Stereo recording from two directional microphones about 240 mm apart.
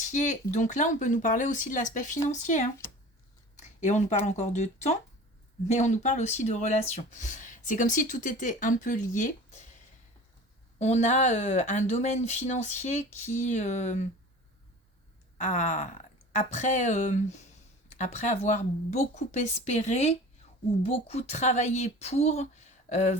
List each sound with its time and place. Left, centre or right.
0.0 s speech: left
3.5 s a sound: left
4.3 s speech: left
10.8 s speech: left
15.4 s speech: left